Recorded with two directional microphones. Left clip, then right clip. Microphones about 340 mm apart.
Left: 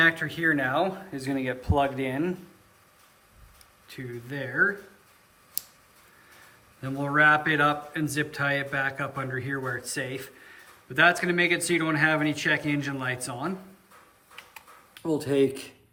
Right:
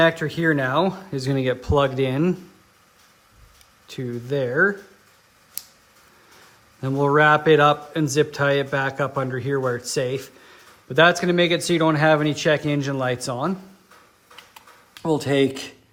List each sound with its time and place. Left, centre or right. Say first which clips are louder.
0.0 s a man's voice: right 4 dB; centre
3.8 s a man's voice: right 9 dB; centre
6.8 s a man's voice: right 5 dB; centre
15.0 s speech: right 4 dB; right